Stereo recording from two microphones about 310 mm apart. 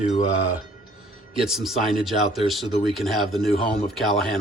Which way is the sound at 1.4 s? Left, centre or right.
Centre.